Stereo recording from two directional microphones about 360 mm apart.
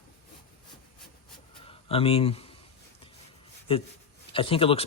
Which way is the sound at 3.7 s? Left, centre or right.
Centre.